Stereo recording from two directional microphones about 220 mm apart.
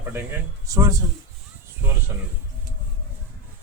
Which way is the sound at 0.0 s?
10° right (ahead or behind).